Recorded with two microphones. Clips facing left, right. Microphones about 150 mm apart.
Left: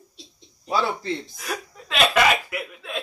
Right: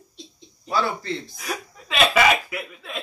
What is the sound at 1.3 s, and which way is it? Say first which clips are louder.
Chuckle: even; centre (ahead or behind).